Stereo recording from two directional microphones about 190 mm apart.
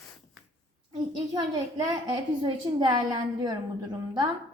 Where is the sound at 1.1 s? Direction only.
20° right (ahead or behind).